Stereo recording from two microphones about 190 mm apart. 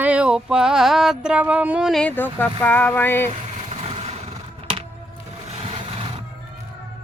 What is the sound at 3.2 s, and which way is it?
Vehicle, 35° right (ahead or behind).